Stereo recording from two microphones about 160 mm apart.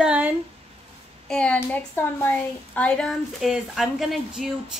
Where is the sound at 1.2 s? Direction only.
5° left (ahead or behind).